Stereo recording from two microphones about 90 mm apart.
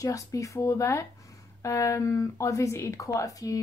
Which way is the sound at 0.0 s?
40° left (ahead or behind).